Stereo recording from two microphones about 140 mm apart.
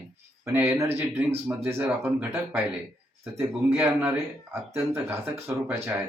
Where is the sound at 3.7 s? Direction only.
10° right (ahead or behind).